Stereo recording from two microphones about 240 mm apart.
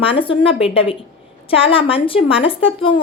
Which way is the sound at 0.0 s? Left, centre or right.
Left.